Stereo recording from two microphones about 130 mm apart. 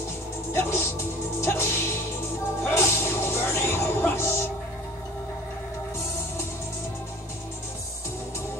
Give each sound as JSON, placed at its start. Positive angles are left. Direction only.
{"t": 0.5, "sound": "speech", "side_deg": 20}
{"t": 2.6, "sound": "music", "side_deg": 20}